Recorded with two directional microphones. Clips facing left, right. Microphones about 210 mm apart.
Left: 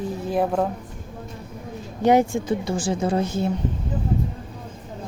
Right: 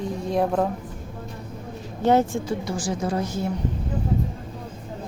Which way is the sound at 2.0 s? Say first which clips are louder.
Left 2 dB; 15° left (ahead or behind).